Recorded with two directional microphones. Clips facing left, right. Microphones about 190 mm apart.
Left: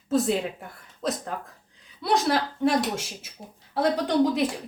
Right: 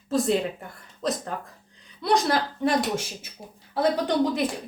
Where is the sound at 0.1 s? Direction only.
Centre (ahead or behind).